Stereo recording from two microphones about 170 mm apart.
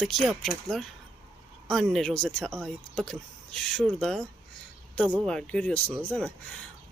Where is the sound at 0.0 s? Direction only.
5° left (ahead or behind).